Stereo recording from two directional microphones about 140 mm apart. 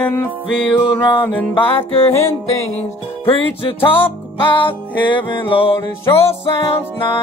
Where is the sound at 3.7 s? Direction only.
40° left (ahead or behind).